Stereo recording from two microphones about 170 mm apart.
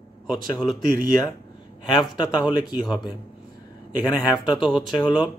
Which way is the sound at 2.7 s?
10° right (ahead or behind).